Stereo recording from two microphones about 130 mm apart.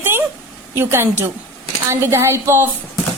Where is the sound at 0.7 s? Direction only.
20° right (ahead or behind).